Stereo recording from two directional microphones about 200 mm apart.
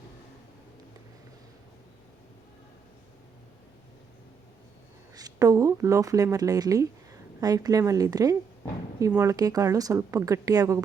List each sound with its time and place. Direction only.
5.1 s a woman's voice: 20° right (ahead or behind)